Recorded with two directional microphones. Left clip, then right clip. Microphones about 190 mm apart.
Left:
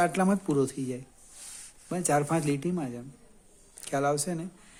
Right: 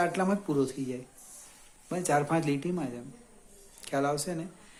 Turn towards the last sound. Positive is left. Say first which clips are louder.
# left 2 dB
turn(degrees=40)  # may be behind; listen again after turning